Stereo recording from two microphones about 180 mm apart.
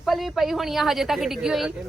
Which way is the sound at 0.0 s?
Centre (ahead or behind).